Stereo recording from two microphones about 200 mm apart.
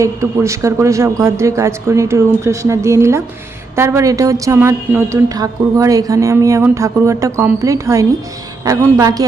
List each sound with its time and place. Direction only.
0.0 s a woman's voice: 15° right (ahead or behind)